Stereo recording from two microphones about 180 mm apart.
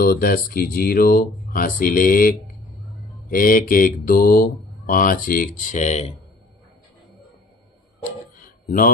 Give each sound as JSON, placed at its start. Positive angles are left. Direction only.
{"t": 0.0, "sound": "speech", "side_deg": 55}